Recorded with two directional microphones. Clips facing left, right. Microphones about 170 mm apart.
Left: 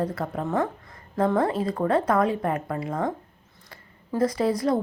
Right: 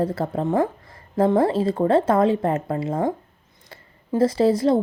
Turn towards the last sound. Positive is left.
turn(degrees=-25)  # may be behind; listen again after turning